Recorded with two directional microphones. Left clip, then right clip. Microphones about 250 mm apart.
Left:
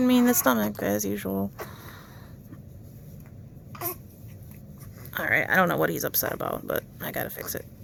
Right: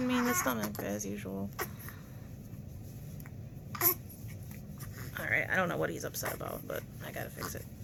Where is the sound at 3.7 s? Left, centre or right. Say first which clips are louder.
Right 1 dB; centre.